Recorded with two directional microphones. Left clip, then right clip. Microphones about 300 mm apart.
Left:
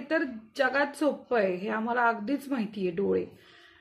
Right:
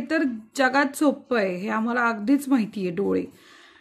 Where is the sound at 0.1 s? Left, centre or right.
Right.